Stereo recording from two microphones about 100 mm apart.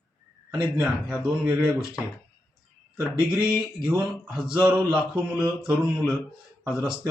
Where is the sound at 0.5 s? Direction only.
10° right (ahead or behind).